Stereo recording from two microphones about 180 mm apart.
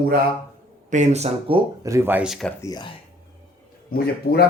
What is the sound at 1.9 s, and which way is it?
Speech, 10° right (ahead or behind).